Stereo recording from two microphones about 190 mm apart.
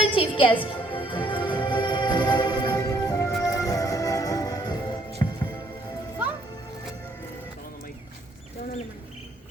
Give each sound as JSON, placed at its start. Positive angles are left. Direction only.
{"t": 0.0, "sound": "music", "side_deg": 30}